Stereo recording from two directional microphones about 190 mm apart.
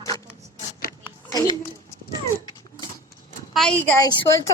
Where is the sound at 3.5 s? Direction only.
5° left (ahead or behind).